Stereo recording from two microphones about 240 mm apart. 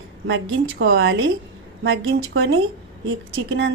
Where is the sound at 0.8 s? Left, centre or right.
Right.